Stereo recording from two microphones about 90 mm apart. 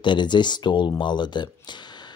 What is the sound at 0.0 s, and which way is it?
Speech, 60° left (ahead or behind).